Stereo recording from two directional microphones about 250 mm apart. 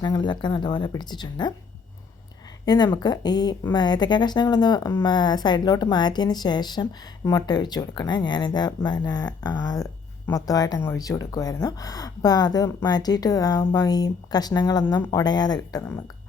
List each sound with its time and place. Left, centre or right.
0.0 s speech: centre
2.6 s speech: centre